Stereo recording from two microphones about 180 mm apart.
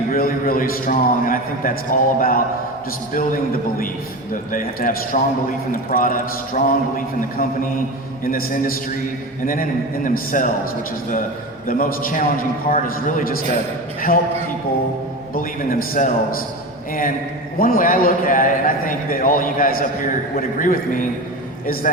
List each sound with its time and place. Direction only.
0.1 s a man's voice: 50° left (ahead or behind)
11.7 s a man's voice: 50° left (ahead or behind)
15.4 s a man's voice: 50° left (ahead or behind)